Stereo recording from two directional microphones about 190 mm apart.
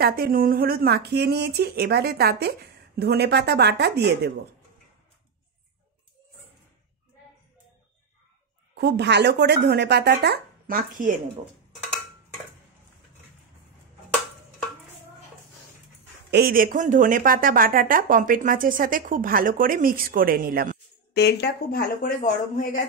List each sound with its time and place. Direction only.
0.0 s speech: 50° right (ahead or behind)
8.7 s speech: 60° right (ahead or behind); by 11.1 s 45° right (ahead or behind)
16.3 s speech: 55° right (ahead or behind)
21.1 s speech: 60° left (ahead or behind); by 22.8 s 45° left (ahead or behind)